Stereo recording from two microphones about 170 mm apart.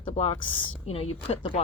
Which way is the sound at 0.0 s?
35° left (ahead or behind).